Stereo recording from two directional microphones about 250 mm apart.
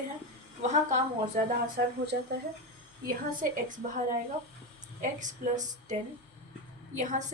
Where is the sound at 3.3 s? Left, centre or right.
Right.